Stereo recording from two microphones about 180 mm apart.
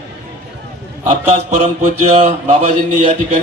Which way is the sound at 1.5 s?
40° right (ahead or behind).